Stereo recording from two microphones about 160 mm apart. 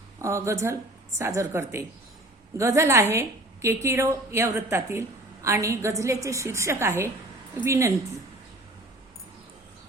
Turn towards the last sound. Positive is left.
turn(degrees=-20)  # may be behind; listen again after turning